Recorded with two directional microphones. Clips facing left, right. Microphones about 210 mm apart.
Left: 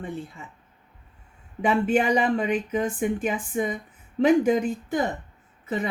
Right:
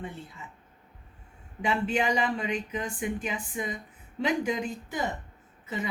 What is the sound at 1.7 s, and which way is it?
Speech, 50° left (ahead or behind).